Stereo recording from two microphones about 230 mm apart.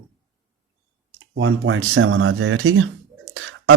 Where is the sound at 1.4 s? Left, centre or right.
Right.